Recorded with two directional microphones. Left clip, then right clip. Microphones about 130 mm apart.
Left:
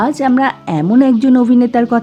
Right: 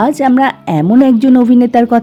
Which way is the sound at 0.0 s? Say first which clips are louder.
Right 3 dB; 55° right (ahead or behind).